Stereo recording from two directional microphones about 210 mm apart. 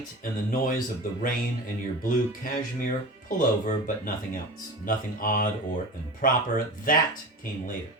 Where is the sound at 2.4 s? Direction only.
40° left (ahead or behind).